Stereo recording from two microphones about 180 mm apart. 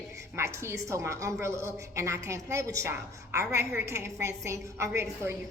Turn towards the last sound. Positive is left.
turn(degrees=-15)  # may be behind; listen again after turning